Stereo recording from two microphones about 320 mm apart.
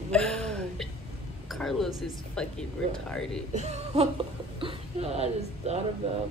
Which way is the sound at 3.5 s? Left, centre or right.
Centre.